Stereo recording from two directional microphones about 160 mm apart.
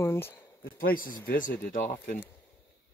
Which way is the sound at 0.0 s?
15° left (ahead or behind).